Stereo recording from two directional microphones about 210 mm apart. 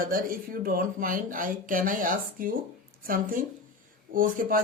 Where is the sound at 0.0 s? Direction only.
45° right (ahead or behind).